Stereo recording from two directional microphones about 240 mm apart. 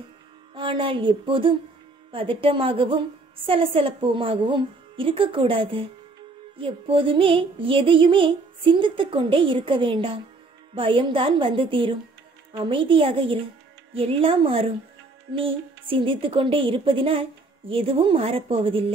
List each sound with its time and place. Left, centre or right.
0.6 s music: right